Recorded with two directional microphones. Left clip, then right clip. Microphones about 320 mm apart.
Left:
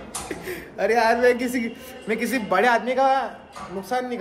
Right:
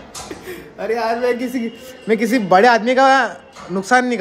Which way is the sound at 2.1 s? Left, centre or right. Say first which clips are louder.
Right 9 dB; centre.